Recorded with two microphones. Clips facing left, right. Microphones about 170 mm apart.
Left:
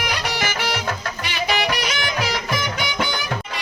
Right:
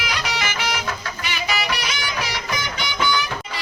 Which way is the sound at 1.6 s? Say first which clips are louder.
Left 3 dB; 55° left (ahead or behind).